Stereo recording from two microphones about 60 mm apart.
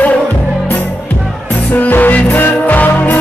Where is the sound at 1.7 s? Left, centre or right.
Left.